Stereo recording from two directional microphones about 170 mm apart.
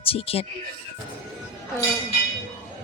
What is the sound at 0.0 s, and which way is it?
Speech, 35° left (ahead or behind).